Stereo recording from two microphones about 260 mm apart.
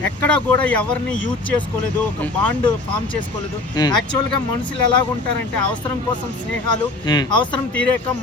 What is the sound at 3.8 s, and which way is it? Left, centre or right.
Speech, centre.